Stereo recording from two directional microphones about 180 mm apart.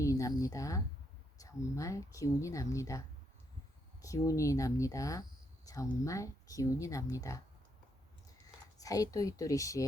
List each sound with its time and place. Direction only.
0.0 s speech: 20° left (ahead or behind)
4.0 s speech: 20° left (ahead or behind)
8.8 s speech: 20° left (ahead or behind)